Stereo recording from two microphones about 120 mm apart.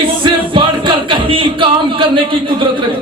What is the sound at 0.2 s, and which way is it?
Music, 45° right (ahead or behind).